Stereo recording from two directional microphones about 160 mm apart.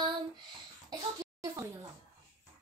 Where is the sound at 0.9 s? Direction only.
20° right (ahead or behind).